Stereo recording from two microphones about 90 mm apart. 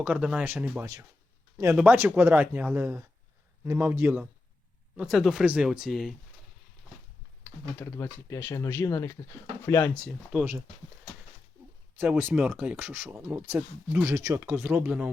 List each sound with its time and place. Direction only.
0.0 s speech: 15° right (ahead or behind)
0.8 s speech: 40° right (ahead or behind)
1.7 s speech: 15° right (ahead or behind)
5.0 s speech: centre (ahead or behind)
7.8 s speech: 25° left (ahead or behind)
10.3 s speech: 15° right (ahead or behind)
11.9 s speech: 20° right (ahead or behind)
14.0 s speech: 35° right (ahead or behind); by 15.1 s 15° right (ahead or behind)